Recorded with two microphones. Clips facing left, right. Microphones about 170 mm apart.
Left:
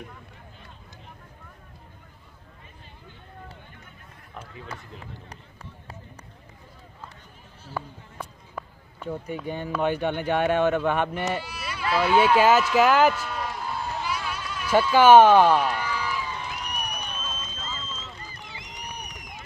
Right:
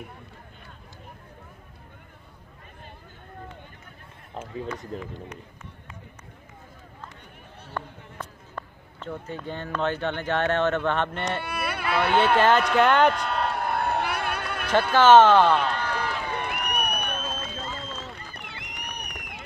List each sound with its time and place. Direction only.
4.4 s speech: 30° right (ahead or behind)
4.9 s speech: 45° right (ahead or behind)
7.7 s speech: 10° left (ahead or behind)
11.4 s a sound: 60° right (ahead or behind)
12.4 s speech: 5° left (ahead or behind)
13.1 s a sound: 65° right (ahead or behind)
15.0 s speech: 10° left (ahead or behind)
15.7 s run: 60° right (ahead or behind)